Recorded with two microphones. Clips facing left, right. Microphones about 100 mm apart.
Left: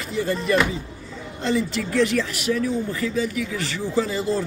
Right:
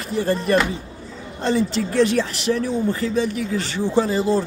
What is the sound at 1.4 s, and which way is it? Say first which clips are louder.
Speech: right 3 dB; 30° right (ahead or behind).